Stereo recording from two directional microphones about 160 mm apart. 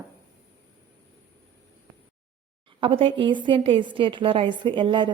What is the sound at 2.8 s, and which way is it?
A woman's voice, 35° right (ahead or behind).